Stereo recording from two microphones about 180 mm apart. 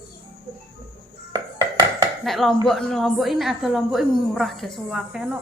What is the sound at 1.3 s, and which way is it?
Music, 20° right (ahead or behind).